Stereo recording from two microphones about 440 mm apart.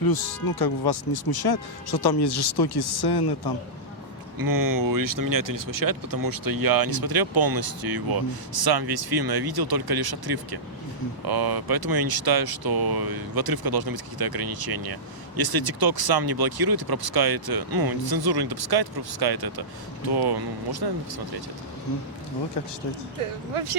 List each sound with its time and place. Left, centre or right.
0.0 s speech: left
4.4 s speech: right
23.2 s speech: right